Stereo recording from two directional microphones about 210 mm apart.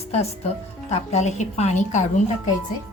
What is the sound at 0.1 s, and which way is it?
A woman's voice, 30° left (ahead or behind).